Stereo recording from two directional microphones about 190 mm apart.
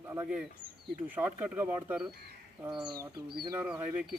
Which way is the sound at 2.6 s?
25° right (ahead or behind).